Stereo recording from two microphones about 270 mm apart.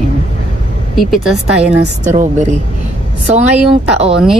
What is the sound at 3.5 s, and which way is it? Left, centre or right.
Speech, centre.